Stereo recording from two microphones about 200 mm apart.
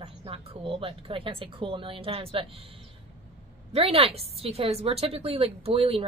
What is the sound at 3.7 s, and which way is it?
Speech, 30° right (ahead or behind).